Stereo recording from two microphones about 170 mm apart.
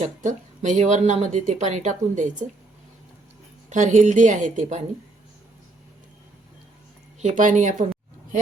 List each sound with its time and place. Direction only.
0.0 s speech: 45° right (ahead or behind)
3.7 s speech: 45° right (ahead or behind)
7.2 s speech: 45° right (ahead or behind)